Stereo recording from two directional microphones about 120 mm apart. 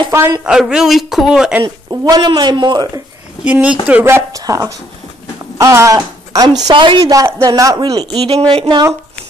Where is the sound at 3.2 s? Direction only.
10° right (ahead or behind); by 6.4 s 30° right (ahead or behind).